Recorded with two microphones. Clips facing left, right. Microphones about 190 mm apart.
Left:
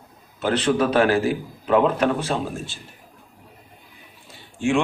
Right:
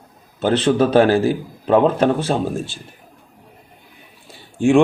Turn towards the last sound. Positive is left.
turn(degrees=-55)  # may be behind; listen again after turning